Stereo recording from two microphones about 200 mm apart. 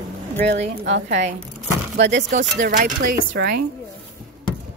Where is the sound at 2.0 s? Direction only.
60° right (ahead or behind).